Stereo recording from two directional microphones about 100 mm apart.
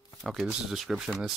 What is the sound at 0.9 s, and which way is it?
Speech, 5° right (ahead or behind).